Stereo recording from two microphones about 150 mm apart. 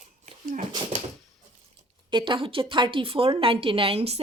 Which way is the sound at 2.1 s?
35° right (ahead or behind).